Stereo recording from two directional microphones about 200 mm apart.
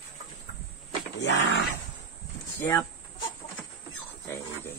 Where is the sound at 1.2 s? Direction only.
60° left (ahead or behind).